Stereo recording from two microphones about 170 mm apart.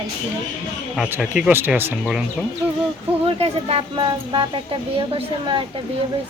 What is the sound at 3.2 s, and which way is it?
Speech, 35° right (ahead or behind).